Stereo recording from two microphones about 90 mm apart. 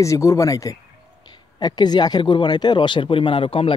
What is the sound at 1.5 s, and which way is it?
Speech, 50° left (ahead or behind).